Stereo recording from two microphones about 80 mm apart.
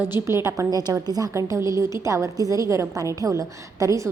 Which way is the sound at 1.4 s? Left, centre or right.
Right.